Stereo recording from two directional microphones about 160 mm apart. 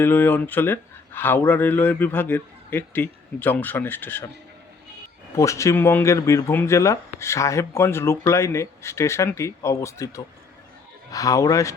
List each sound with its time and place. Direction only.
0.0 s speech: 10° left (ahead or behind)
5.4 s a man's voice: 20° left (ahead or behind)